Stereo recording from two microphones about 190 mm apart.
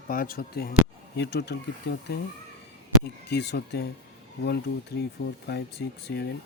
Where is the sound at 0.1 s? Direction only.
50° left (ahead or behind).